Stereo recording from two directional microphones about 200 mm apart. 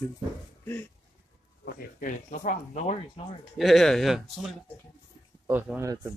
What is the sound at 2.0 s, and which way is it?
Speech, 40° left (ahead or behind).